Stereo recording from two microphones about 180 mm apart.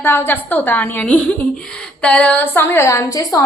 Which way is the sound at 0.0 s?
10° left (ahead or behind).